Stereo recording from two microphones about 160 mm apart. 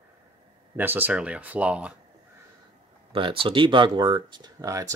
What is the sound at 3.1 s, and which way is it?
Speech, 35° right (ahead or behind).